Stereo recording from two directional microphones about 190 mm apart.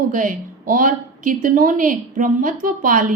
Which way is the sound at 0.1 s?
45° right (ahead or behind).